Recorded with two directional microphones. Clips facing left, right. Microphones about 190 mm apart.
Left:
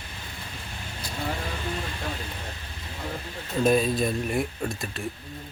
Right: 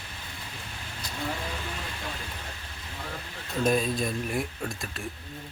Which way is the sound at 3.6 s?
Centre (ahead or behind).